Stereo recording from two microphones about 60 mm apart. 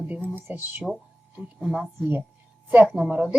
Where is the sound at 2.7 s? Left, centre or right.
Right.